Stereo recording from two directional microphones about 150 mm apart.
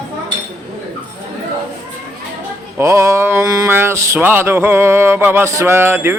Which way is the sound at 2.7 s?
20° right (ahead or behind).